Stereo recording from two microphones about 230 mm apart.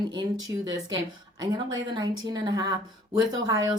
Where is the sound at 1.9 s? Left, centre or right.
Centre.